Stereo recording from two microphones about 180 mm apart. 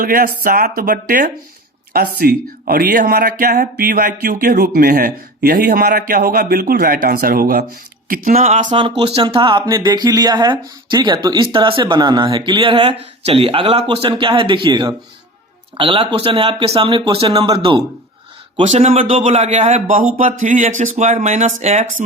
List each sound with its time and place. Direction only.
0.0 s speech: 50° right (ahead or behind)